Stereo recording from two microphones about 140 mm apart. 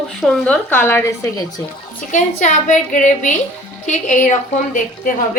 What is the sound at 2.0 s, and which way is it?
A woman's voice, 60° left (ahead or behind).